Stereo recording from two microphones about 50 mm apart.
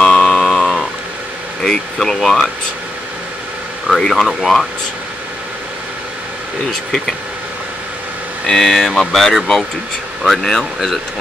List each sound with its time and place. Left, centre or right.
0.0 s a sound: centre
1.6 s speech: centre
4.0 s speech: centre
8.5 s speech: centre